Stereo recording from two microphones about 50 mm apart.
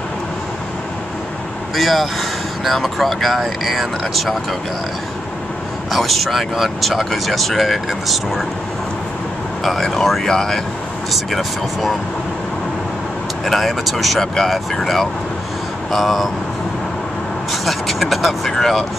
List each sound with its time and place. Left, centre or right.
1.8 s speech: centre
5.9 s speech: centre
10.2 s speech: centre
13.5 s speech: centre
14.2 s speech: centre
17.5 s speech: centre